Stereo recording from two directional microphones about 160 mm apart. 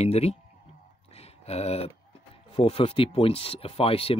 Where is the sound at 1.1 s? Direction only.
40° left (ahead or behind).